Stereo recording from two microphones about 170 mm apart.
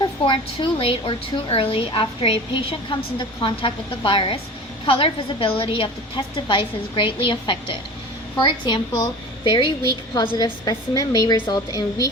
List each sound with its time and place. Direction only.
0.0 s a woman's voice: 30° left (ahead or behind)